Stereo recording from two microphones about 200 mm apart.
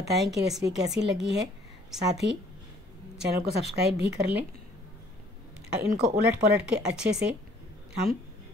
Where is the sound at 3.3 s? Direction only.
55° right (ahead or behind).